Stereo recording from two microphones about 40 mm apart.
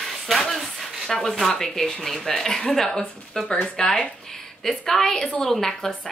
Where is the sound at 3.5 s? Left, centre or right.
Left.